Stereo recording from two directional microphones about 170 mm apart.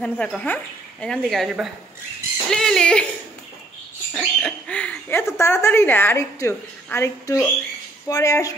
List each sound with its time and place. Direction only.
0.0 s speech: 5° left (ahead or behind)
4.1 s speech: 5° left (ahead or behind); by 8.5 s 20° left (ahead or behind)